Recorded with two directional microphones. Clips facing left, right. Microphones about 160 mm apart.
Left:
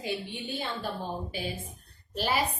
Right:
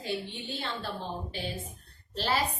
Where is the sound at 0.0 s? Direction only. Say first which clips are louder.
Left 1 dB; 15° left (ahead or behind).